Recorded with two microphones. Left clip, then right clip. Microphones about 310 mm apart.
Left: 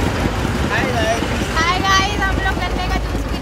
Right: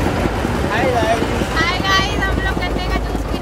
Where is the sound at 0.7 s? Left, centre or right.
Centre.